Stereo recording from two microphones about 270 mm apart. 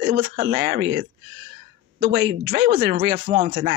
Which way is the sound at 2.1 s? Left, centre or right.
Right.